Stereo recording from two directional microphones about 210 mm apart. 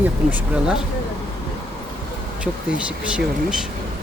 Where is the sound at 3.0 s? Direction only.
5° right (ahead or behind).